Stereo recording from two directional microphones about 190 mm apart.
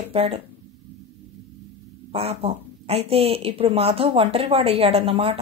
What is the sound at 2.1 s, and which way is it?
Speech, 30° right (ahead or behind).